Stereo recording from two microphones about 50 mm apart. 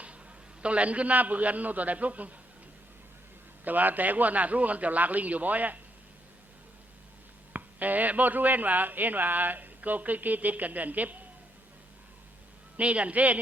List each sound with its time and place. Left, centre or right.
0.6 s a man's voice: right
3.6 s a man's voice: right
7.5 s a man's voice: right
12.7 s a man's voice: right